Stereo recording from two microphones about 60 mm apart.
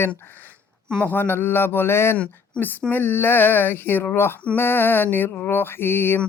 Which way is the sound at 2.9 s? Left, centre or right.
Left.